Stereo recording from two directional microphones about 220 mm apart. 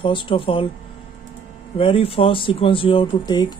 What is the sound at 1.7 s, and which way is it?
Speech, 25° left (ahead or behind).